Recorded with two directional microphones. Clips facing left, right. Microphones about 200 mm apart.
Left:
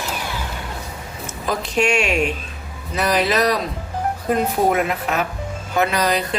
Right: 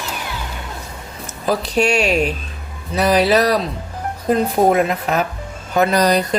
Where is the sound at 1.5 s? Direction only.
35° right (ahead or behind).